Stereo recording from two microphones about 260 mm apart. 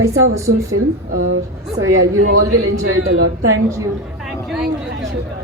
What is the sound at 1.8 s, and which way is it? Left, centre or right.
Speech, right.